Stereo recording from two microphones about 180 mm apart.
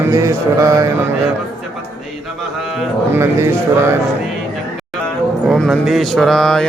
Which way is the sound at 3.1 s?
15° right (ahead or behind).